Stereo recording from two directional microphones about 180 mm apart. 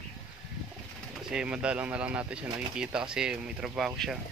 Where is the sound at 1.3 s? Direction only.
5° right (ahead or behind).